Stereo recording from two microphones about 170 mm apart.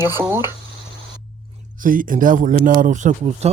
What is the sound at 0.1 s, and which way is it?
Speech, 15° right (ahead or behind).